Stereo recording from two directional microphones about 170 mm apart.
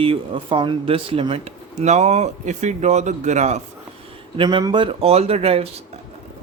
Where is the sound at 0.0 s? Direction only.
30° right (ahead or behind).